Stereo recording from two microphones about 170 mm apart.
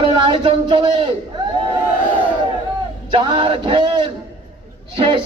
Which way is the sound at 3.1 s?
30° right (ahead or behind).